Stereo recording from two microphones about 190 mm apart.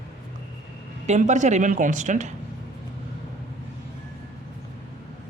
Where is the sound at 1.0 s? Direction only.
40° right (ahead or behind).